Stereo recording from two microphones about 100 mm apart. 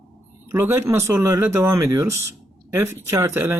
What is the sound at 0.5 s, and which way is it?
Speech, 25° right (ahead or behind).